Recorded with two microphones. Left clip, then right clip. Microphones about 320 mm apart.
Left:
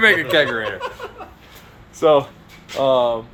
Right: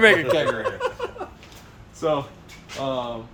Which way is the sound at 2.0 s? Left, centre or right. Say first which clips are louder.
Left 9 dB; centre.